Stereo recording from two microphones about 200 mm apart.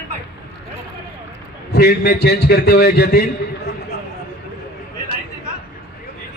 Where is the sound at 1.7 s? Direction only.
50° left (ahead or behind).